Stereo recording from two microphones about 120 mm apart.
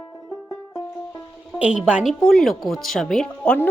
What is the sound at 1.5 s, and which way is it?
A woman's voice, 10° right (ahead or behind).